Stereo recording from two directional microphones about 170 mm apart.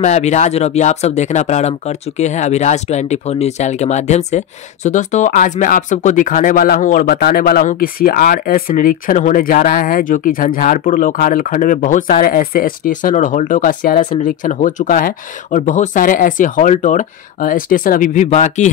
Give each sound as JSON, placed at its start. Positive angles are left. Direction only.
{"t": 0.0, "sound": "speech", "side_deg": 40}
{"t": 14.1, "sound": "speech", "side_deg": 45}